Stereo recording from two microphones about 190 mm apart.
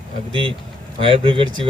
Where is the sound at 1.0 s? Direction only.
25° right (ahead or behind).